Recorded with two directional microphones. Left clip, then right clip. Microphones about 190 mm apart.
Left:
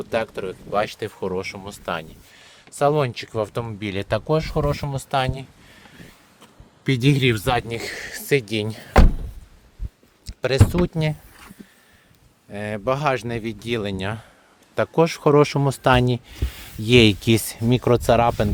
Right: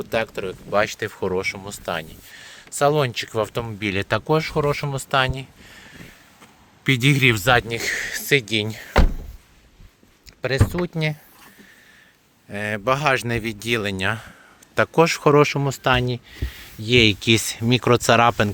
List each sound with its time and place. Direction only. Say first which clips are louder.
0.0 s speech: right 1 dB; 5° right (ahead or behind); by 8.9 s 20° left (ahead or behind)
10.2 s speech: left 2 dB; 35° left (ahead or behind); by 11.2 s 20° left (ahead or behind)
12.5 s speech: right 2 dB; centre (ahead or behind); by 17.2 s 30° left (ahead or behind)
17.2 s speech: right 2 dB; 15° left (ahead or behind)